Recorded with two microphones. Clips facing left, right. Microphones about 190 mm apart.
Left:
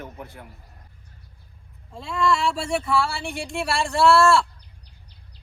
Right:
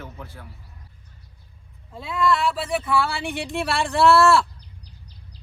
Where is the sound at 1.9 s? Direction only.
Centre (ahead or behind).